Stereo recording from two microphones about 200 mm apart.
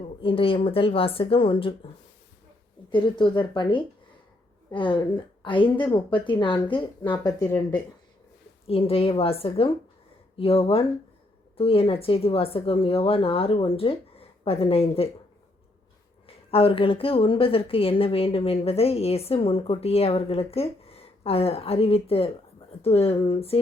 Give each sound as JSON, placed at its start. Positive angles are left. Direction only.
{"t": 0.2, "sound": "a woman's voice", "side_deg": 25}
{"t": 2.9, "sound": "a woman's voice", "side_deg": 25}
{"t": 8.6, "sound": "a woman's voice", "side_deg": 30}
{"t": 16.2, "sound": "a woman's voice", "side_deg": 30}